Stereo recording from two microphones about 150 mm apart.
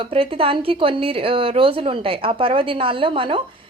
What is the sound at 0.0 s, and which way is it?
A woman's voice, 40° right (ahead or behind).